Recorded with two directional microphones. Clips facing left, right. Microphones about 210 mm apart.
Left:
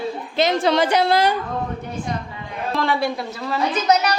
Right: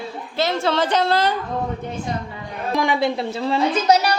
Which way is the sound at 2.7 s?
15° right (ahead or behind).